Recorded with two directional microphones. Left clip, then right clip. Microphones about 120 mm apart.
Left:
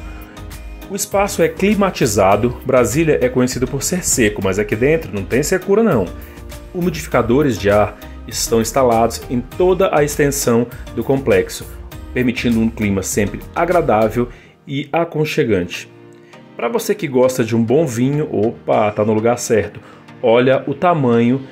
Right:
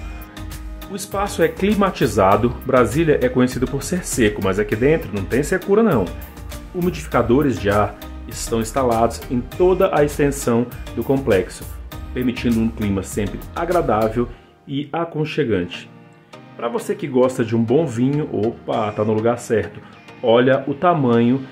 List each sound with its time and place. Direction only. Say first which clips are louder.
0.9 s speech: left 5 dB; 20° left (ahead or behind)